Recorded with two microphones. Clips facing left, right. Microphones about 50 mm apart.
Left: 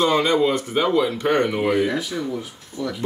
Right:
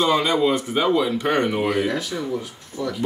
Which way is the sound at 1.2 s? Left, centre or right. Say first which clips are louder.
Left 1 dB; centre.